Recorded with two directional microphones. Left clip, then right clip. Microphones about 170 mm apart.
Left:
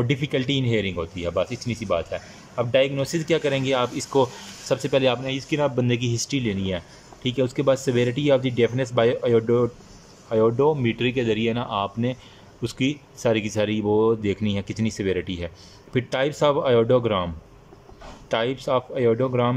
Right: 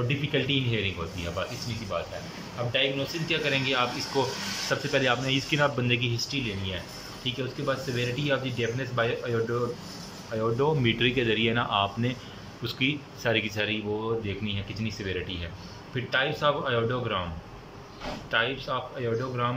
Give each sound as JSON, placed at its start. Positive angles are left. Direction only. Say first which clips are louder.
{"t": 0.1, "sound": "speech", "louder": "left 3 dB", "side_deg": 35}
{"t": 12.6, "sound": "speech", "louder": "left 2 dB", "side_deg": 40}
{"t": 18.3, "sound": "speech", "louder": "left 5 dB", "side_deg": 40}